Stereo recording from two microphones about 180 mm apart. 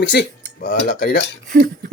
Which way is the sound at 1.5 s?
60° right (ahead or behind).